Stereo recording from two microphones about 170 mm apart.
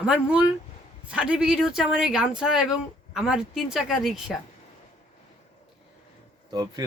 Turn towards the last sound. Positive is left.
turn(degrees=-25)  # may be behind; listen again after turning